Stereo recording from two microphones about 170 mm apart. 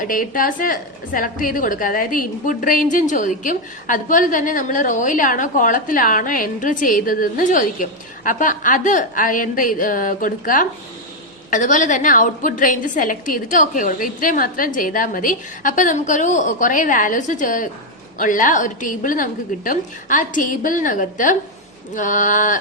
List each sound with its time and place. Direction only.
0.0 s a woman's voice: 55° left (ahead or behind)